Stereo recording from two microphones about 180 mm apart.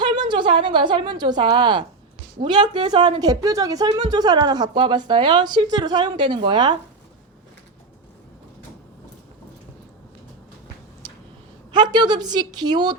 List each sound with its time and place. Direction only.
0.0 s a woman's voice: 25° right (ahead or behind)
11.7 s speech: 25° right (ahead or behind)